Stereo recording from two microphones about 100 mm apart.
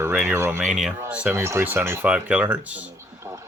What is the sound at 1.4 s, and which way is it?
Speech, 25° right (ahead or behind).